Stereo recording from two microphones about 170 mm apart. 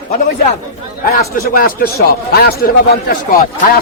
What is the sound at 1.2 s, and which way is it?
A man's voice, 60° left (ahead or behind).